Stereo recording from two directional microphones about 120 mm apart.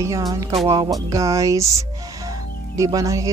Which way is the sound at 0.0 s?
30° right (ahead or behind).